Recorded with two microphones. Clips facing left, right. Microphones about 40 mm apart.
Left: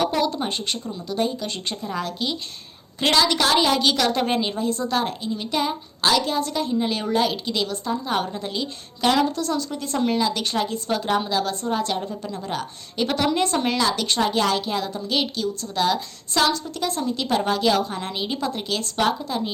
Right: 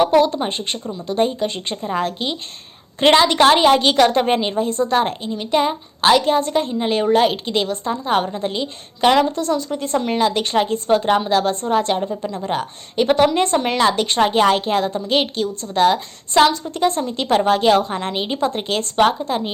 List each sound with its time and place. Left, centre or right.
0.0 s a woman's voice: right